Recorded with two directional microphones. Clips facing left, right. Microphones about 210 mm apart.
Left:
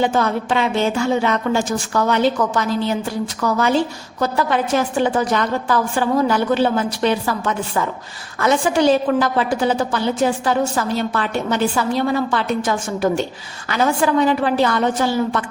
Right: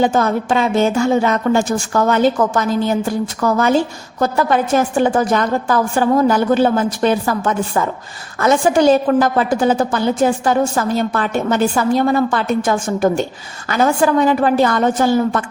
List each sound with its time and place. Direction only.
0.0 s a woman's voice: 45° right (ahead or behind)